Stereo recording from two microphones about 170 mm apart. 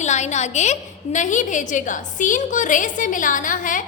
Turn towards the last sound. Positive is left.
turn(degrees=50)  # may be behind; listen again after turning